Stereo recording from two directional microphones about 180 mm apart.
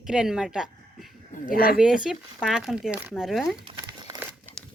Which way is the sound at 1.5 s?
55° left (ahead or behind).